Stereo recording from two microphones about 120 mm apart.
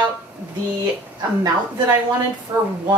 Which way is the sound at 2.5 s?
20° right (ahead or behind).